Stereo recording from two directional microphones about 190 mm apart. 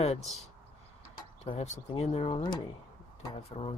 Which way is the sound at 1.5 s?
35° left (ahead or behind).